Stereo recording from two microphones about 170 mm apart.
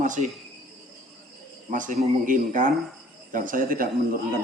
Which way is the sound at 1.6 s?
50° right (ahead or behind).